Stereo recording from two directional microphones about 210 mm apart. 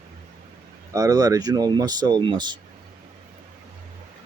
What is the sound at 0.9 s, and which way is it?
Speech, 15° right (ahead or behind).